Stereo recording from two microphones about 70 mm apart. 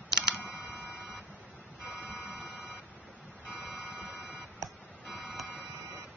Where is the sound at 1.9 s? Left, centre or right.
Right.